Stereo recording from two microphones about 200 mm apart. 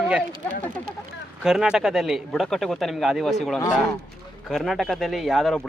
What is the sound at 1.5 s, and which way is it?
Speech, 5° right (ahead or behind).